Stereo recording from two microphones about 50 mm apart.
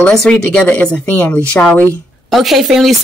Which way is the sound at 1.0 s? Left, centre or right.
Left.